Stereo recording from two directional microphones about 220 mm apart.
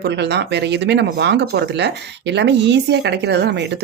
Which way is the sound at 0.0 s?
50° right (ahead or behind).